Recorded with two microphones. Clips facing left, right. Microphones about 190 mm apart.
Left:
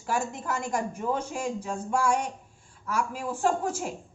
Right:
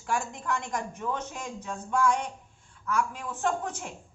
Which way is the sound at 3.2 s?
35° left (ahead or behind).